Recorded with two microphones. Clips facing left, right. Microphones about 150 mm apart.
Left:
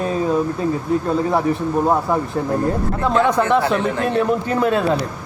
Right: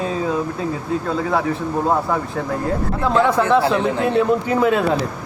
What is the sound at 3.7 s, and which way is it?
Speech, 20° right (ahead or behind).